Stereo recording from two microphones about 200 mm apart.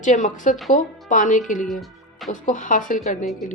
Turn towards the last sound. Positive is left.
turn(degrees=0)  # may be behind; listen again after turning